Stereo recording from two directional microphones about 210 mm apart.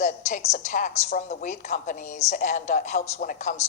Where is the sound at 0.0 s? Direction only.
35° left (ahead or behind).